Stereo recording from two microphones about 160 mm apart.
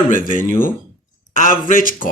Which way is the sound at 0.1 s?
55° left (ahead or behind).